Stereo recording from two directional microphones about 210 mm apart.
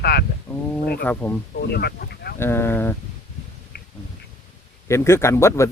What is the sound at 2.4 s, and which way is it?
Speech, 10° left (ahead or behind).